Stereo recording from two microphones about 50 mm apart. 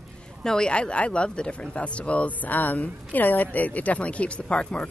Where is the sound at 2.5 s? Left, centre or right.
Left.